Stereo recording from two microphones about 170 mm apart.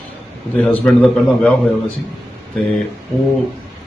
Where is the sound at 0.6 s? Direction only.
5° left (ahead or behind).